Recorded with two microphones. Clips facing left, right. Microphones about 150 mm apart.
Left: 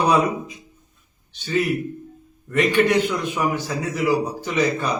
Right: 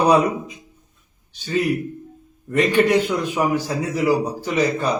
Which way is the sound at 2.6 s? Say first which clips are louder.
Right 1 dB; 35° right (ahead or behind).